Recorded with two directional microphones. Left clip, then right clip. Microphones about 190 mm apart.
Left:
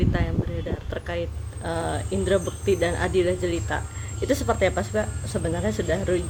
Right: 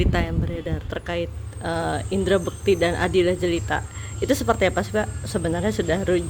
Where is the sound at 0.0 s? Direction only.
40° right (ahead or behind).